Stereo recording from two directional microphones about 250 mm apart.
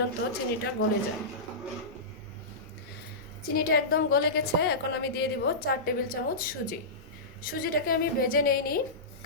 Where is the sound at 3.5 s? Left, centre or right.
Left.